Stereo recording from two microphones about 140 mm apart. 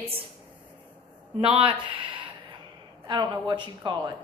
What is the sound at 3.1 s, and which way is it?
Speech, 30° right (ahead or behind).